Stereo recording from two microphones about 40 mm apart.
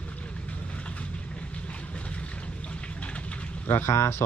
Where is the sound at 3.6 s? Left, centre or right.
Left.